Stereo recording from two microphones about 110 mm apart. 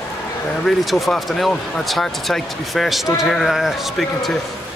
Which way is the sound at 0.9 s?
Centre (ahead or behind).